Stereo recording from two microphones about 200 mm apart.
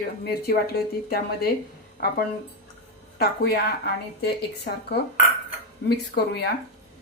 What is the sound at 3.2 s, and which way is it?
A woman's voice, 50° left (ahead or behind).